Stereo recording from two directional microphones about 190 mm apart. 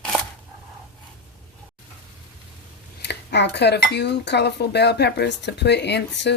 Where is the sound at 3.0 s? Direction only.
65° left (ahead or behind).